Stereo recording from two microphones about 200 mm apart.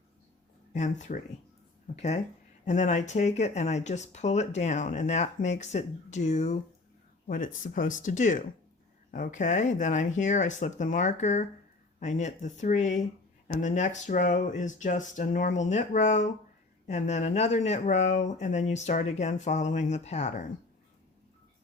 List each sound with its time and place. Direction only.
0.7 s speech: 40° left (ahead or behind)
2.6 s speech: 35° left (ahead or behind)